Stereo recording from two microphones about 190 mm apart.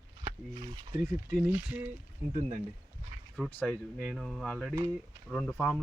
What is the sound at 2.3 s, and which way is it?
Speech, 40° right (ahead or behind).